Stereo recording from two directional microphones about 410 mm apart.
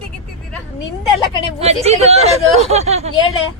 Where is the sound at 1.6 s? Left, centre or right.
Centre.